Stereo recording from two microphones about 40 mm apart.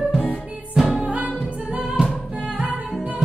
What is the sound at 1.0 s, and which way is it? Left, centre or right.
Music, right.